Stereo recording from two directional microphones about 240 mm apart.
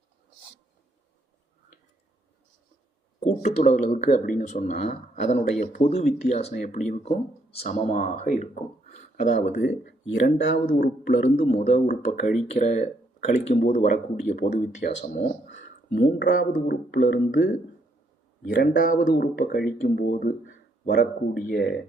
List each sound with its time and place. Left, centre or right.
3.2 s speech: left
9.8 s speech: left
11.5 s speech: left
15.9 s speech: left